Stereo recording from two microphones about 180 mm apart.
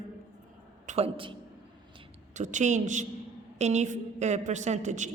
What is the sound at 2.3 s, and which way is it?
A woman's voice, 40° right (ahead or behind).